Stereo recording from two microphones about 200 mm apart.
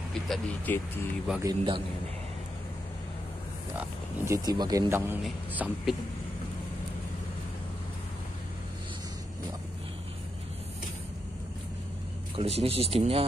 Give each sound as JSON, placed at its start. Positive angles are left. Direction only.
{"t": 0.1, "sound": "speech", "side_deg": 5}
{"t": 1.4, "sound": "speech", "side_deg": -20}
{"t": 4.3, "sound": "a man's voice", "side_deg": -20}
{"t": 12.4, "sound": "speech", "side_deg": -30}